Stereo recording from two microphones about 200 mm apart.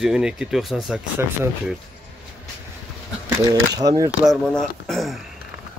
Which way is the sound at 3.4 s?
20° right (ahead or behind).